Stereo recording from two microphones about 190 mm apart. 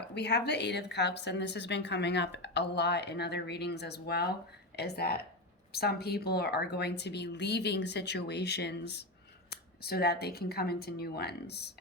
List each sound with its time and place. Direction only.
0.1 s a woman's voice: 60° left (ahead or behind)